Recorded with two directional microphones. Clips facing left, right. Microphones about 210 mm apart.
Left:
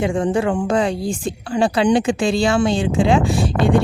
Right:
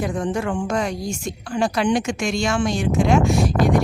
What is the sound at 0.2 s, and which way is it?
Speech, 30° left (ahead or behind).